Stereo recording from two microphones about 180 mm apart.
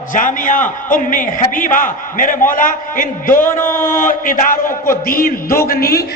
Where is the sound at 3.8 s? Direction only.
50° left (ahead or behind).